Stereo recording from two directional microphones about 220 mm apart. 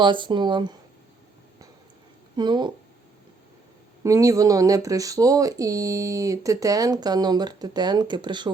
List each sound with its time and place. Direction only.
0.0 s speech: 20° right (ahead or behind)
2.3 s speech: 20° right (ahead or behind)
4.0 s speech: 15° right (ahead or behind)